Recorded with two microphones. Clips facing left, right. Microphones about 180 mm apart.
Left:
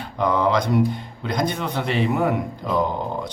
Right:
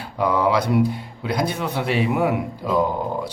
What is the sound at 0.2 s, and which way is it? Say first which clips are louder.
A man's voice: right 1 dB; 5° right (ahead or behind).